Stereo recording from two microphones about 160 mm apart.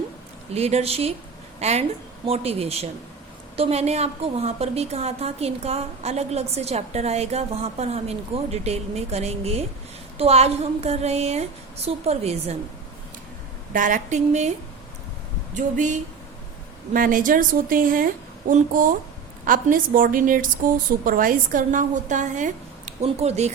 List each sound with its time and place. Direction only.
0.5 s a woman's voice: 40° right (ahead or behind)
13.7 s a woman's voice: 55° right (ahead or behind)
15.5 s a woman's voice: 50° right (ahead or behind)